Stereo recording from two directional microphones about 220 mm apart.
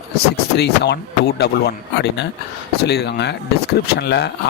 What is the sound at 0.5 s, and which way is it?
Speech, 50° left (ahead or behind).